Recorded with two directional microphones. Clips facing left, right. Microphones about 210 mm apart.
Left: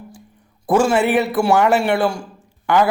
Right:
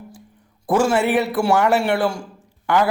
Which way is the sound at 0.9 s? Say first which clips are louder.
Left 2 dB; 20° left (ahead or behind).